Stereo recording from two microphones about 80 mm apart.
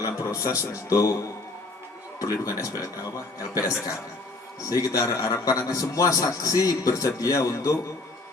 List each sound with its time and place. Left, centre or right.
0.0 s a man's voice: left
2.1 s a man's voice: left